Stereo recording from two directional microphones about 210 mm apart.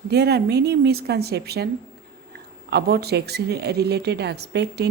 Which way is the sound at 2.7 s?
50° right (ahead or behind).